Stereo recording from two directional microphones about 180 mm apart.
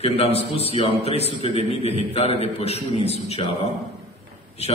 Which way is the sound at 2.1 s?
35° left (ahead or behind).